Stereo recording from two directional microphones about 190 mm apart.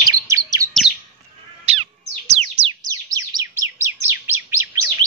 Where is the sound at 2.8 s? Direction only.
20° right (ahead or behind).